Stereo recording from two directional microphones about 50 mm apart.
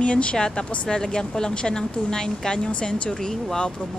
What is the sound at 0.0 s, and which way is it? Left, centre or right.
A woman's voice, left.